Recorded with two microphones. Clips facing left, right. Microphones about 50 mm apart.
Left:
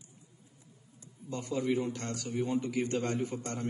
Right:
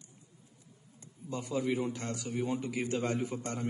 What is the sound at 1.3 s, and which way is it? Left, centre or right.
A man's voice, centre.